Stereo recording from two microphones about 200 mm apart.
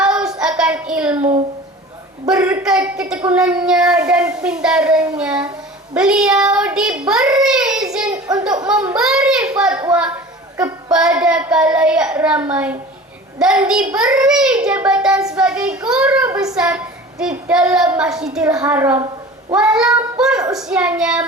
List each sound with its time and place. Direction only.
0.0 s child singing: 5° right (ahead or behind)
1.2 s a sound: 35° right (ahead or behind)
2.2 s a woman's voice: 5° right (ahead or behind)
7.4 s child singing: 5° right (ahead or behind)
8.6 s a woman's voice: 5° right (ahead or behind)
10.9 s a woman's voice: 5° right (ahead or behind)